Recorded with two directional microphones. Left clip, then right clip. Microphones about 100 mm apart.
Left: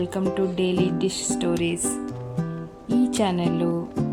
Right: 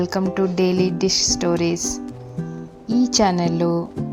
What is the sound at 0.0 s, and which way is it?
Music, centre (ahead or behind).